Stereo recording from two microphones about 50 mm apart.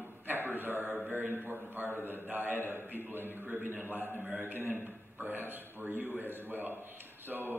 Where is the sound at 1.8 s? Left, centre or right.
Left.